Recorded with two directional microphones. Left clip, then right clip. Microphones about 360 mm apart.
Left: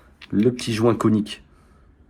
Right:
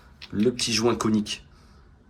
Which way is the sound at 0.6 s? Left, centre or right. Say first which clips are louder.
Left 3 dB; centre.